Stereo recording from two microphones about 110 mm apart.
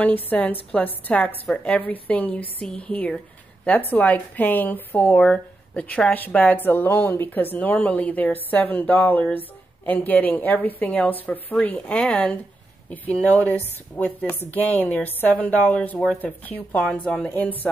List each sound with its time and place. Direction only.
0.0 s a woman's voice: 15° left (ahead or behind)